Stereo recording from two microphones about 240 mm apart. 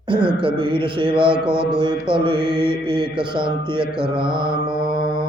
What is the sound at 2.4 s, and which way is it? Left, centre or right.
Mantra, right.